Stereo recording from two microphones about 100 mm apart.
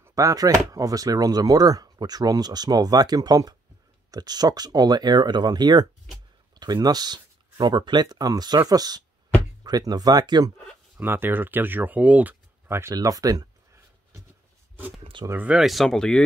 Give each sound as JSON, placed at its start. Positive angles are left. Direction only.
{"t": 0.0, "sound": "speech", "side_deg": -35}
{"t": 11.0, "sound": "speech", "side_deg": -20}
{"t": 12.9, "sound": "speech", "side_deg": -35}
{"t": 15.4, "sound": "speech", "side_deg": -5}